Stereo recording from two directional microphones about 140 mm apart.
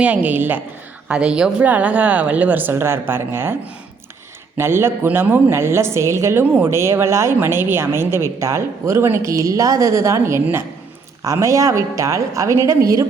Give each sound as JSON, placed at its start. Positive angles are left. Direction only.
{"t": 0.0, "sound": "a woman's voice", "side_deg": -10}
{"t": 4.5, "sound": "a woman's voice", "side_deg": -15}